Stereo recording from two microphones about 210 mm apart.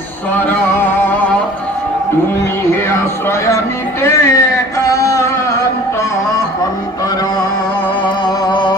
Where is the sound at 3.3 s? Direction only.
15° left (ahead or behind).